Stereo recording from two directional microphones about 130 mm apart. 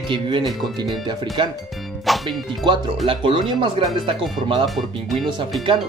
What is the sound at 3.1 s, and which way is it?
Speech, 40° right (ahead or behind).